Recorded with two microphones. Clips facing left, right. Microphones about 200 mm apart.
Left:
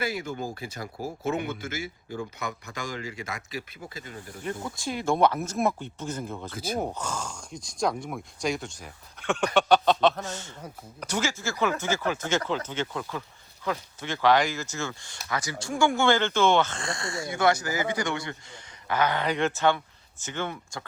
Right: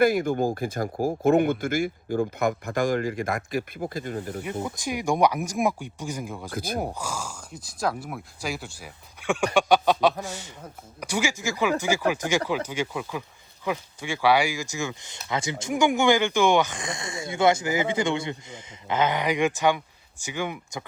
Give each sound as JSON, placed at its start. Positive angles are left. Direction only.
{"t": 0.0, "sound": "speech", "side_deg": -55}
{"t": 4.6, "sound": "speech", "side_deg": -15}
{"t": 6.5, "sound": "speech", "side_deg": -55}
{"t": 6.7, "sound": "speech", "side_deg": -10}